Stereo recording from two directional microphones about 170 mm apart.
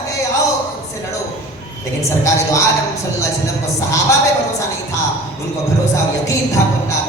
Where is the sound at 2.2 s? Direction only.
20° left (ahead or behind).